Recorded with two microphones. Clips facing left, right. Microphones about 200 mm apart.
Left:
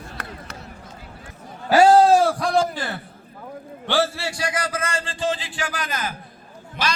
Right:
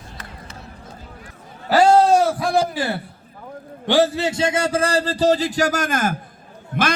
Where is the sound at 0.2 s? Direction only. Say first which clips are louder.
Left 5 dB; 65° left (ahead or behind).